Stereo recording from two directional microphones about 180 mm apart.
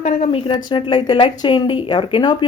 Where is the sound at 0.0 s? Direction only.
45° left (ahead or behind).